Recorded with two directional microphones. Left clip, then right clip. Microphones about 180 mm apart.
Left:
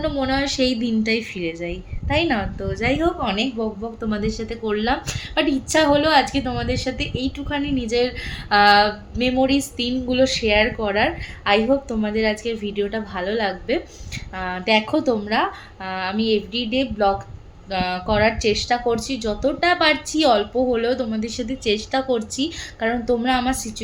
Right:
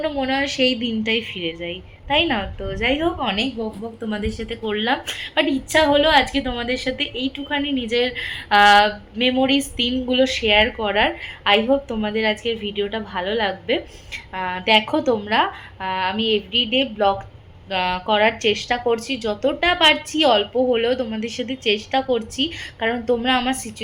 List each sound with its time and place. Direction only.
0.0 s a woman's voice: 10° left (ahead or behind)